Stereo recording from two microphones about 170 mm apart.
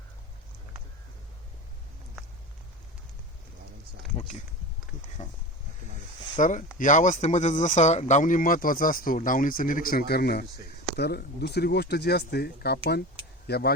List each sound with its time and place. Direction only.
4.1 s speech: 40° left (ahead or behind)
6.4 s speech: 50° left (ahead or behind); by 13.7 s 70° left (ahead or behind)